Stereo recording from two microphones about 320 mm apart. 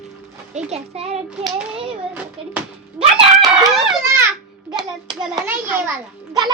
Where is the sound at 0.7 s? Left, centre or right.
Centre.